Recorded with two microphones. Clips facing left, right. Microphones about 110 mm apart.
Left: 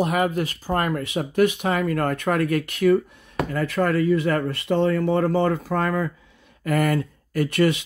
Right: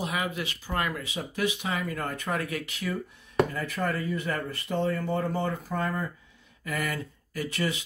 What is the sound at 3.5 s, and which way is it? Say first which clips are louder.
Speech: left 9 dB; 80° left.